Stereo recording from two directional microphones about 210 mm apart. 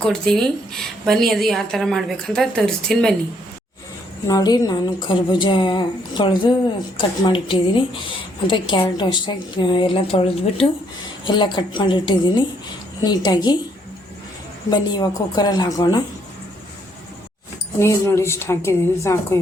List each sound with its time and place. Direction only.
0.0 s a woman's voice: centre (ahead or behind)
4.3 s a woman's voice: 15° left (ahead or behind)
14.7 s a woman's voice: 20° left (ahead or behind)
17.7 s a woman's voice: 15° left (ahead or behind)